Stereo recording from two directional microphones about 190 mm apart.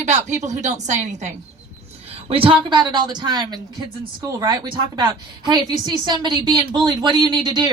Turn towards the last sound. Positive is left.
turn(degrees=-20)  # may be behind; listen again after turning